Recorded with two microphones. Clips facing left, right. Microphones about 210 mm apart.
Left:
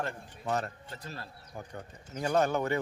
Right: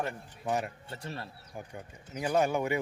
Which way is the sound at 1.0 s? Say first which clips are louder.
Right 4 dB; 25° right (ahead or behind).